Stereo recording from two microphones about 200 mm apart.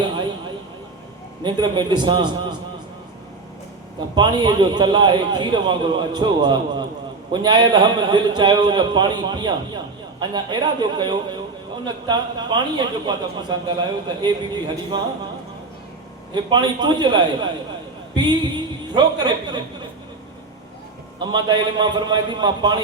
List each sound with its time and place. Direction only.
1.5 s a man's voice: 20° right (ahead or behind)
4.1 s a man's voice: 20° right (ahead or behind)
16.3 s a man's voice: 20° right (ahead or behind)
21.2 s a man's voice: 20° right (ahead or behind)